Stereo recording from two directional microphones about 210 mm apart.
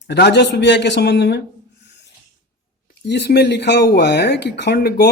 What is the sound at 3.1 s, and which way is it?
Speech, 50° left (ahead or behind).